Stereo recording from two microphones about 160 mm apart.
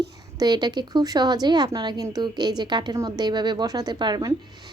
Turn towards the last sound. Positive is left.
turn(degrees=-25)  # may be behind; listen again after turning